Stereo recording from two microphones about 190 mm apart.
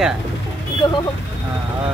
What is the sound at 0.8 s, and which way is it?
Speech, 25° left (ahead or behind).